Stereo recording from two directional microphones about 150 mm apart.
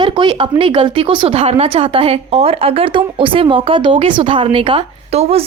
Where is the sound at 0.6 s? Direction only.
35° right (ahead or behind).